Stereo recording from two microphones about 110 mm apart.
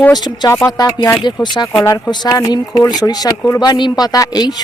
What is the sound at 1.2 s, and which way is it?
Speech, 40° left (ahead or behind).